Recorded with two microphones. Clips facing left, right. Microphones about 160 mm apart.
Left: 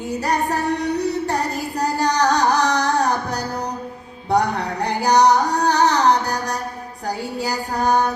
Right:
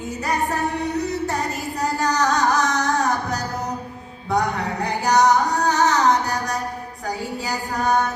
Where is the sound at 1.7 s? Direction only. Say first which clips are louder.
Left 2 dB; 35° left (ahead or behind).